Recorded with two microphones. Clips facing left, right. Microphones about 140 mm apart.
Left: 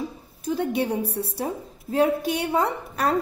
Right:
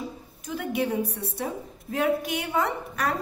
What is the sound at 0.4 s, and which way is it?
A woman's voice, 35° left (ahead or behind).